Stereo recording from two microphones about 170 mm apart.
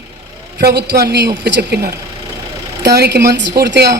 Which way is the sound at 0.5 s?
70° right (ahead or behind).